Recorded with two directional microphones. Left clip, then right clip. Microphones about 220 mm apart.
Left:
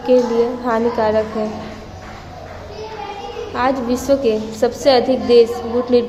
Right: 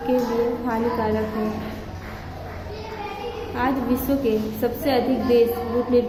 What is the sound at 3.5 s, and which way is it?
A woman's voice, 15° left (ahead or behind).